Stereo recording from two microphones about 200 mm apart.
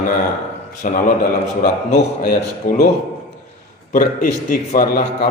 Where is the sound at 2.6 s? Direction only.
45° left (ahead or behind).